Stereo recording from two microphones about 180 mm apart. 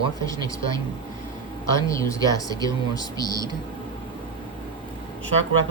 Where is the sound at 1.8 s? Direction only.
15° left (ahead or behind).